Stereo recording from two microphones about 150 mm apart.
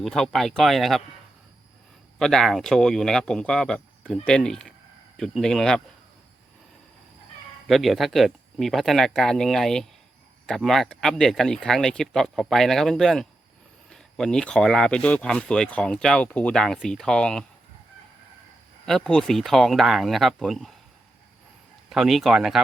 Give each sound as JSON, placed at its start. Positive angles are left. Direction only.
{"t": 0.0, "sound": "speech", "side_deg": 0}
{"t": 2.1, "sound": "speech", "side_deg": 0}
{"t": 7.7, "sound": "speech", "side_deg": 0}
{"t": 18.9, "sound": "speech", "side_deg": 5}
{"t": 21.8, "sound": "speech", "side_deg": 0}